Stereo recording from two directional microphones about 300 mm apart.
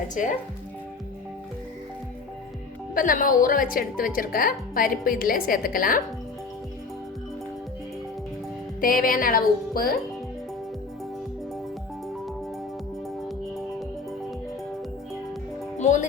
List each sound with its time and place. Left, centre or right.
0.1 s speech: left
2.9 s speech: left
8.8 s speech: left
15.8 s speech: left